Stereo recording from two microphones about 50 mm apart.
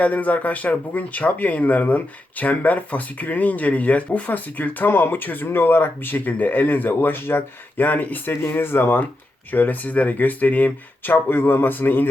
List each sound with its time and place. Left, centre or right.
0.0 s speech: left
7.9 s speech: left
9.5 s speech: left